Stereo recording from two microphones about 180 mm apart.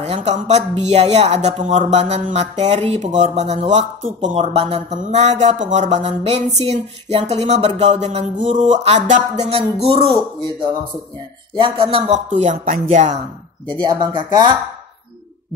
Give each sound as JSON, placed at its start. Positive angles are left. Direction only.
{"t": 0.0, "sound": "speech", "side_deg": -35}
{"t": 11.5, "sound": "speech", "side_deg": -30}
{"t": 12.1, "sound": "speech", "side_deg": -40}
{"t": 13.7, "sound": "speech", "side_deg": -25}